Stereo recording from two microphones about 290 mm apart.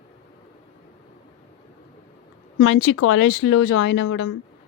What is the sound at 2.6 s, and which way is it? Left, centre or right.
A woman's voice, left.